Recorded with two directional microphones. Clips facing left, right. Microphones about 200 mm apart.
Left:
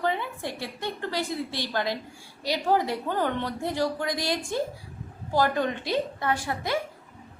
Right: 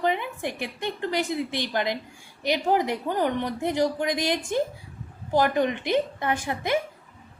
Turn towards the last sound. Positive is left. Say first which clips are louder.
# right 2 dB
turn(degrees=-20)  # may be behind; listen again after turning